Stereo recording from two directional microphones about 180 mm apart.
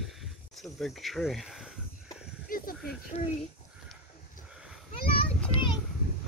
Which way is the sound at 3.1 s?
35° left (ahead or behind).